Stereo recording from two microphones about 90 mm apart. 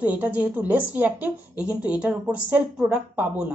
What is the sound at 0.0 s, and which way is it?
Speech, 15° right (ahead or behind).